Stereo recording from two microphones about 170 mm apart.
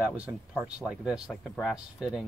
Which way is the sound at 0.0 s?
5° right (ahead or behind).